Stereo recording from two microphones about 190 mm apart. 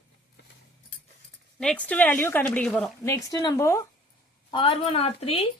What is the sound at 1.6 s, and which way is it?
A woman's voice, 5° left (ahead or behind).